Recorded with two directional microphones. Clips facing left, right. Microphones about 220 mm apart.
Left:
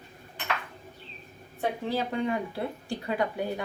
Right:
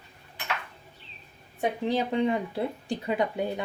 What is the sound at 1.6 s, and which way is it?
Speech, 20° right (ahead or behind).